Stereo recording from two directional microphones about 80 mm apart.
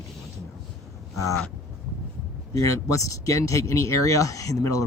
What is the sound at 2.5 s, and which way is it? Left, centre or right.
Speech, left.